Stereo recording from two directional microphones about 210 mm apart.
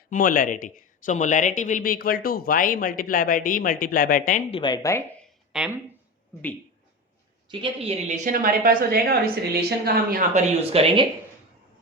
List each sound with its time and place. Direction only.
0.1 s speech: 40° left (ahead or behind)
4.5 s speech: 20° left (ahead or behind)
5.5 s speech: 5° right (ahead or behind)
7.5 s a woman's voice: 25° right (ahead or behind); by 10.4 s 40° right (ahead or behind)
10.6 s speech: 30° right (ahead or behind)